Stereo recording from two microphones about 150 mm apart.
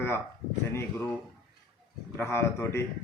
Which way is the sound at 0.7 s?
15° left (ahead or behind).